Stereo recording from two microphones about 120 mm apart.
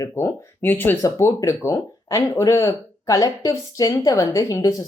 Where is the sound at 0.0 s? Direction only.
20° left (ahead or behind).